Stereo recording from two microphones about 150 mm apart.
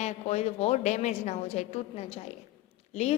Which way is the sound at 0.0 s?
45° left (ahead or behind).